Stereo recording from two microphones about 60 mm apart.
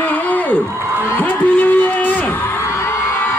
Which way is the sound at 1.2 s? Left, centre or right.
Left.